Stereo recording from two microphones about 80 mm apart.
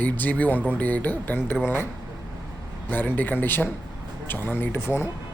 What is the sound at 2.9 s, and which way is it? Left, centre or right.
A man's voice, left.